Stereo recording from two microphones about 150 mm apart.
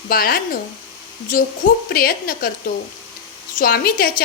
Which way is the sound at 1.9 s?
75° left (ahead or behind).